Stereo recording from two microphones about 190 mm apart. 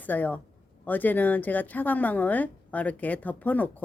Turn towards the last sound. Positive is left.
turn(degrees=10)  # may be behind; listen again after turning